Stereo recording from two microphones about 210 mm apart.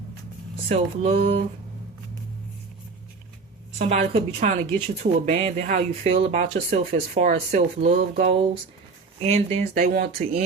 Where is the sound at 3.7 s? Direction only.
30° right (ahead or behind).